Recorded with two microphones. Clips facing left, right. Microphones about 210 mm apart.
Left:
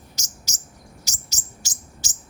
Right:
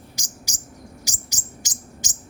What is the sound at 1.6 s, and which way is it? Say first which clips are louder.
Bird: right 4 dB; 20° right (ahead or behind).